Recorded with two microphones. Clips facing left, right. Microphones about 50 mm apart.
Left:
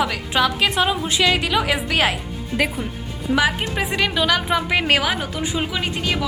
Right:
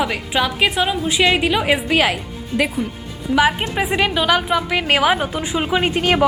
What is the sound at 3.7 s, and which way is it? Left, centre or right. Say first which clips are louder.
Speech: right 3 dB; centre.